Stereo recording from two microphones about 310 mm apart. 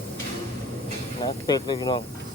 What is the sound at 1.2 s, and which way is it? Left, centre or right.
Speech, centre.